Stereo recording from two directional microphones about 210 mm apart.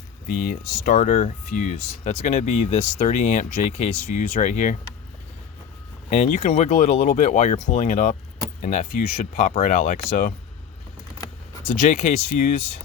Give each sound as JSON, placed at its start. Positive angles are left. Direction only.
{"t": 0.3, "sound": "speech", "side_deg": 40}
{"t": 6.1, "sound": "speech", "side_deg": 35}
{"t": 11.9, "sound": "speech", "side_deg": 40}